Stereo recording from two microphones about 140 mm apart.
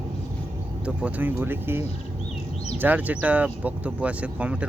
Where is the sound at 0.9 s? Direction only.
10° right (ahead or behind).